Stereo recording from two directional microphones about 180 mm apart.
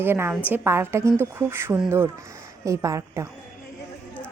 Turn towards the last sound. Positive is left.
turn(degrees=-15)  # may be behind; listen again after turning